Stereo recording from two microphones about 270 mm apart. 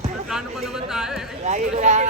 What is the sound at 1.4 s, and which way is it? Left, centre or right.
Speech, right.